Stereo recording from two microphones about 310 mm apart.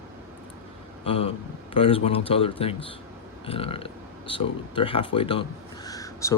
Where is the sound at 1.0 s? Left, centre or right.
Centre.